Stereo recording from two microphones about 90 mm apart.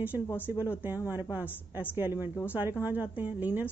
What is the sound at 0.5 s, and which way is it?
Speech, 20° right (ahead or behind).